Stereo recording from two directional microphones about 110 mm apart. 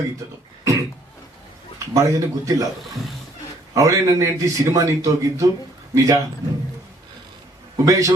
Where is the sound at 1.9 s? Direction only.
30° right (ahead or behind).